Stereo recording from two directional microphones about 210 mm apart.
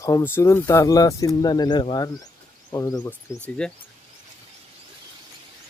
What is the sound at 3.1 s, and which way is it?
Speech, 5° left (ahead or behind).